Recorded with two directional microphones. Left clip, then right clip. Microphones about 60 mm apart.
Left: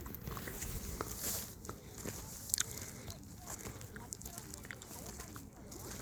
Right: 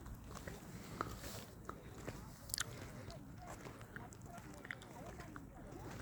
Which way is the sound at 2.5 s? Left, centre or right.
Left.